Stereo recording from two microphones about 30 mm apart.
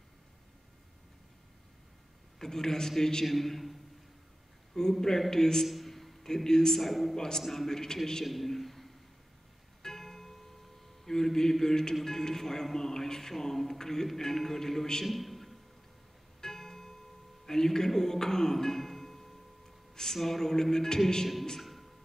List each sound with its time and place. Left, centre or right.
2.3 s a man's voice: centre
3.3 s a man's voice: centre
4.7 s speech: centre
5.7 s a man's voice: centre
6.8 s a man's voice: centre
7.2 s speech: centre
8.3 s a sound: centre
9.8 s music: centre
11.1 s speech: centre
15.0 s a sound: centre
16.3 s music: centre
17.5 s a man's voice: centre
21.5 s music: centre